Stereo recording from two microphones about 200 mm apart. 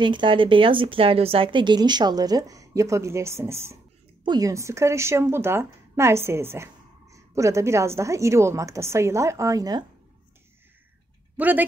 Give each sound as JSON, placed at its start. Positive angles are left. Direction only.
{"t": 0.0, "sound": "a woman's voice", "side_deg": -25}
{"t": 11.3, "sound": "speech", "side_deg": -10}